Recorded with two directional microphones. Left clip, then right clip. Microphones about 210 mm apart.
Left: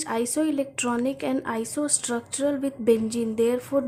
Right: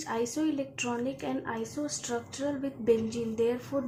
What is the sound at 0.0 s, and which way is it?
A woman's voice, 30° left (ahead or behind).